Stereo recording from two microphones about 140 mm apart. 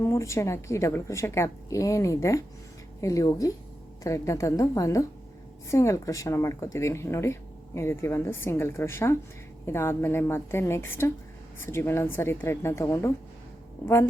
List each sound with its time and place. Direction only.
0.0 s a woman's voice: 20° left (ahead or behind)